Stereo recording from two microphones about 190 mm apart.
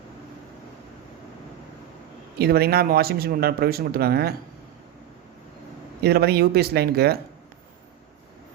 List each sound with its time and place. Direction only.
2.4 s speech: 55° right (ahead or behind)
6.0 s speech: 55° right (ahead or behind)